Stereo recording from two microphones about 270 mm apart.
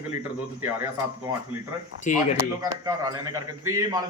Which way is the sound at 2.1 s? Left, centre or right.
Left.